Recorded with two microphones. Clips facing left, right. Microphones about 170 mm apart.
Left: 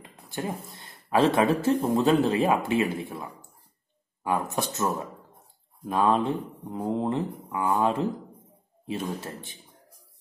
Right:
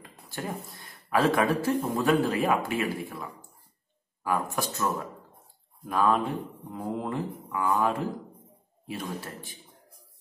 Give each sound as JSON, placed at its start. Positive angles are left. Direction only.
{"t": 0.3, "sound": "speech", "side_deg": 20}
{"t": 9.2, "sound": "speech", "side_deg": 25}